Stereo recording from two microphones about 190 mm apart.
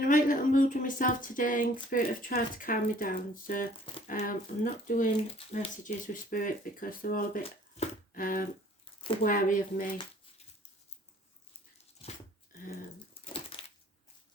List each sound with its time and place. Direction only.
0.0 s speech: 45° left (ahead or behind)
13.2 s crushing: 30° left (ahead or behind)